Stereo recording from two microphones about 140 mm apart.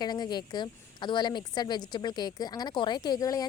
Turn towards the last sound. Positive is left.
turn(degrees=25)  # may be behind; listen again after turning